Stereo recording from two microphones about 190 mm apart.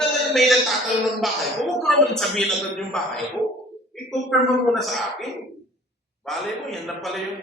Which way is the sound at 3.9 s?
Centre (ahead or behind).